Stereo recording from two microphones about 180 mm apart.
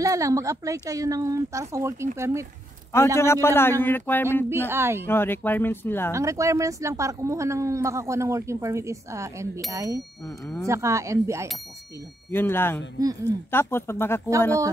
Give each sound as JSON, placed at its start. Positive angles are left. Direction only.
{"t": 0.0, "sound": "speech", "side_deg": -20}
{"t": 3.2, "sound": "speech", "side_deg": 15}
{"t": 4.5, "sound": "speech", "side_deg": -10}
{"t": 5.0, "sound": "speech", "side_deg": 10}
{"t": 6.1, "sound": "speech", "side_deg": -15}
{"t": 12.3, "sound": "speech", "side_deg": 10}